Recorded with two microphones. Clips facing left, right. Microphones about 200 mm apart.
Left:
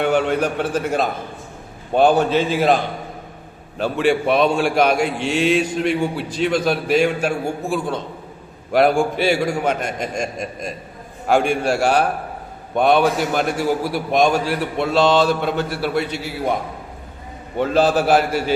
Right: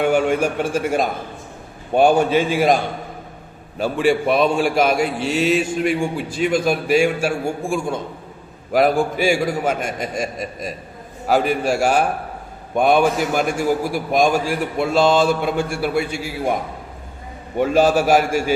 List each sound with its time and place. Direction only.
0.0 s a man's voice: 10° right (ahead or behind)
5.1 s mantra: 40° right (ahead or behind)
5.4 s a man's voice: 5° right (ahead or behind)
17.6 s a man's voice: 10° right (ahead or behind)